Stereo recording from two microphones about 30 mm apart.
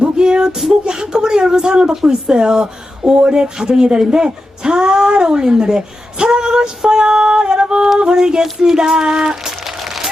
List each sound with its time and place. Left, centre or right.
0.0 s music: right
0.7 s speech: right